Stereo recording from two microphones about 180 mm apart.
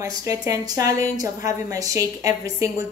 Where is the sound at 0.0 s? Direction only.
15° right (ahead or behind).